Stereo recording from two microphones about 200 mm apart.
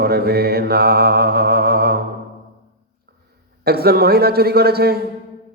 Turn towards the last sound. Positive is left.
turn(degrees=-50)  # may be behind; listen again after turning